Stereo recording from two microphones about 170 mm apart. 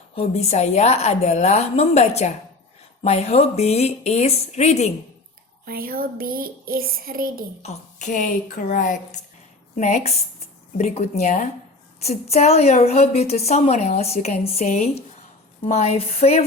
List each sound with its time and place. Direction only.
0.2 s a woman's voice: 40° left (ahead or behind)
5.6 s speech: 60° right (ahead or behind)
7.6 s a woman's voice: 45° left (ahead or behind)